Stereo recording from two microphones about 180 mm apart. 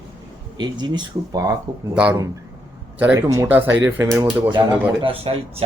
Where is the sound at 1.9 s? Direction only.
5° right (ahead or behind).